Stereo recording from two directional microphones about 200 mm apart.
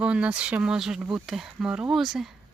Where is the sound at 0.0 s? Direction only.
5° right (ahead or behind).